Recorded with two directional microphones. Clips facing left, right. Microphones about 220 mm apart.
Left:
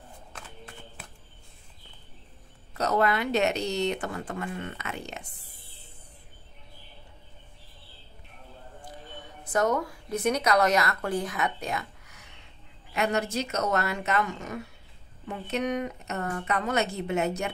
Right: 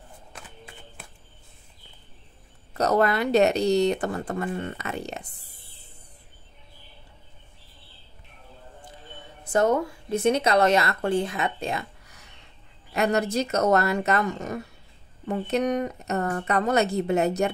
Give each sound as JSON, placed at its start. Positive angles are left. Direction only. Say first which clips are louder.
{"t": 2.8, "sound": "speech", "louder": "right 4 dB", "side_deg": -40}
{"t": 9.4, "sound": "speech", "louder": "right 4 dB", "side_deg": -30}
{"t": 12.9, "sound": "speech", "louder": "right 4 dB", "side_deg": -40}